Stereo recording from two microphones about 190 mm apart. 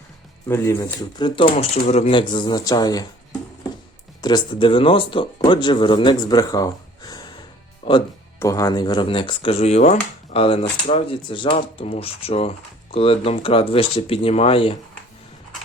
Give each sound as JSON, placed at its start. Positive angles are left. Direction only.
{"t": 0.4, "sound": "speech", "side_deg": 15}
{"t": 1.5, "sound": "speech", "side_deg": 40}
{"t": 4.2, "sound": "speech", "side_deg": 25}